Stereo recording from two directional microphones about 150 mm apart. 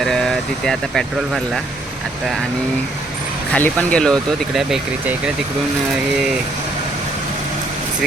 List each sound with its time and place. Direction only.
0.0 s speech: 5° left (ahead or behind)
3.5 s speech: 10° left (ahead or behind)